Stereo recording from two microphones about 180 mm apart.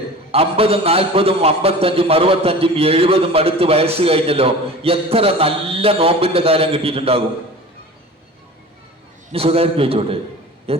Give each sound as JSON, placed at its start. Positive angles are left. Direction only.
{"t": 0.3, "sound": "a man's voice", "side_deg": -35}
{"t": 9.3, "sound": "a man's voice", "side_deg": -35}